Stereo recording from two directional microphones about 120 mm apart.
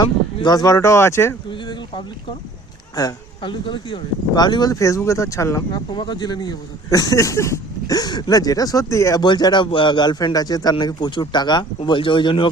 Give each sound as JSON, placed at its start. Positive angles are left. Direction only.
{"t": 0.0, "sound": "speech", "side_deg": 35}
{"t": 1.5, "sound": "speech", "side_deg": 40}
{"t": 5.9, "sound": "speech", "side_deg": 40}
{"t": 9.2, "sound": "speech", "side_deg": 40}